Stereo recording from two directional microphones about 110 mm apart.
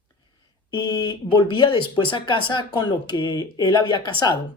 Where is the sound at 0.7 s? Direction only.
50° left (ahead or behind).